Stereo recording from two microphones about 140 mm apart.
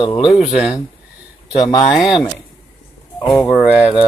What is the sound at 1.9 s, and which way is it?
Speech, centre (ahead or behind).